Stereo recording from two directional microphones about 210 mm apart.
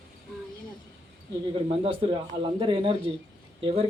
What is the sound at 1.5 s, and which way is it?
Speech, 25° right (ahead or behind).